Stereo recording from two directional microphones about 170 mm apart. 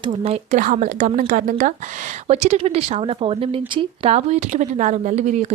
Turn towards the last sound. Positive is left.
turn(degrees=-40)  # may be behind; listen again after turning